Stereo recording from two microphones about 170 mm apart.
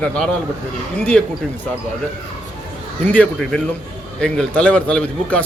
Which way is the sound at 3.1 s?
10° left (ahead or behind).